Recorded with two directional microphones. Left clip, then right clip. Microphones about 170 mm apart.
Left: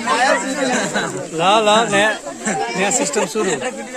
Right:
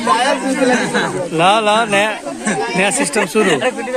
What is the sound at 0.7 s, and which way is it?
Speech, 85° left.